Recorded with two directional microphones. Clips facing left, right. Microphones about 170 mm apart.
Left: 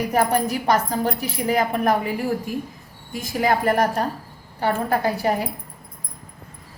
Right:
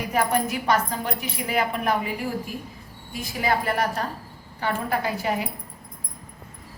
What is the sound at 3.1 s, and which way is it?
A woman's voice, 45° left (ahead or behind).